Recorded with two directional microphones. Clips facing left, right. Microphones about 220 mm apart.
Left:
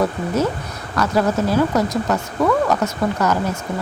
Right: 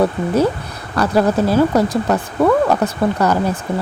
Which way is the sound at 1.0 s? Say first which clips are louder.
Right 3 dB; 35° right (ahead or behind).